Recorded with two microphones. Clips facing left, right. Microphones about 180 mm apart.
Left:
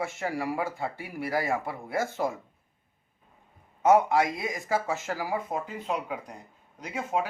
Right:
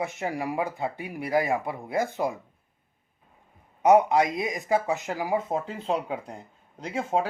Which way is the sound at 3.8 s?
15° right (ahead or behind).